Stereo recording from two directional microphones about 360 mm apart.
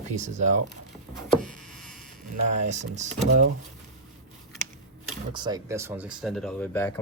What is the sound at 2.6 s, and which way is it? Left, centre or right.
Speech, centre.